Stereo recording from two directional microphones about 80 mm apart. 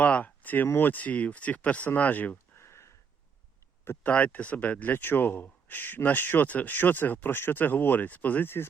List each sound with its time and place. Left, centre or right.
0.0 s speech: centre
2.6 s a sound: left
3.8 s speech: left